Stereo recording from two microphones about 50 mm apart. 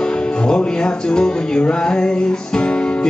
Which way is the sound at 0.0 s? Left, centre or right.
Centre.